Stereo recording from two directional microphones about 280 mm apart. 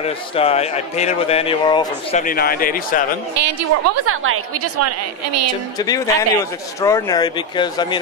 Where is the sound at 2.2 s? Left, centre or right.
Left.